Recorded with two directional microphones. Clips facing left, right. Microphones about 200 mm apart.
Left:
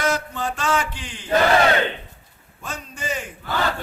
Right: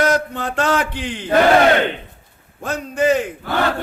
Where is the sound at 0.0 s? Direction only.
60° right (ahead or behind).